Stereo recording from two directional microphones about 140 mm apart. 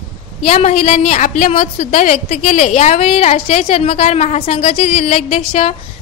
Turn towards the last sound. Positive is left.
turn(degrees=45)  # may be behind; listen again after turning